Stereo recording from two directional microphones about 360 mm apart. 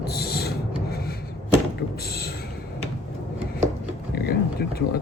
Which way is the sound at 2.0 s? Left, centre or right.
Left.